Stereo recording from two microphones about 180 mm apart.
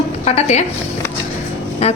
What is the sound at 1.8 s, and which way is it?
Music, 35° left (ahead or behind).